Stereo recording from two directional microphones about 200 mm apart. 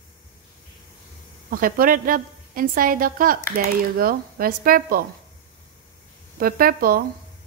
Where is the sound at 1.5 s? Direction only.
45° right (ahead or behind).